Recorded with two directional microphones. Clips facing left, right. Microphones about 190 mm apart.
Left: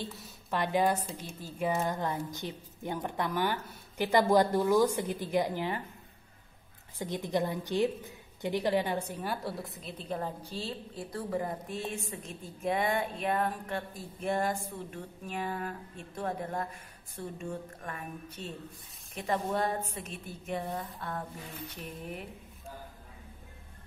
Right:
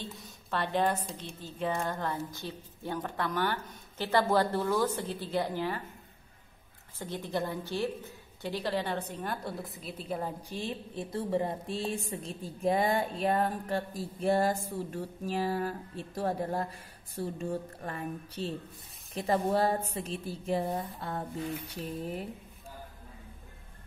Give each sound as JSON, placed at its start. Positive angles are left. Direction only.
{"t": 0.0, "sound": "a woman's voice", "side_deg": 10}
{"t": 7.0, "sound": "a woman's voice", "side_deg": 15}